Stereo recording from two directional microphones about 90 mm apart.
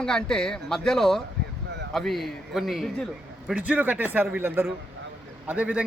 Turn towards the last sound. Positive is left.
turn(degrees=-15)  # may be behind; listen again after turning